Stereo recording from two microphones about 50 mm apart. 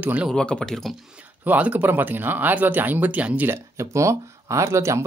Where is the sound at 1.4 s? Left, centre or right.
Right.